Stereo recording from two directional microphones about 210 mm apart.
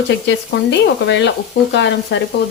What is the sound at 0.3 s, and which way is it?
Sizzle, 55° left (ahead or behind).